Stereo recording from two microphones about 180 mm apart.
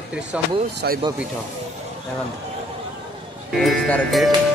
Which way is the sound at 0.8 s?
70° right (ahead or behind).